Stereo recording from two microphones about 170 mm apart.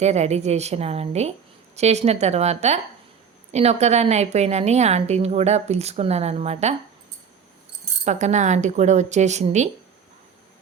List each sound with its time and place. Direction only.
0.0 s a woman's voice: 40° right (ahead or behind)
8.0 s a woman's voice: 45° right (ahead or behind)